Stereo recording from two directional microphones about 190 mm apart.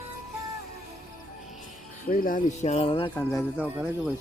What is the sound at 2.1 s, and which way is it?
Speech, 45° left (ahead or behind).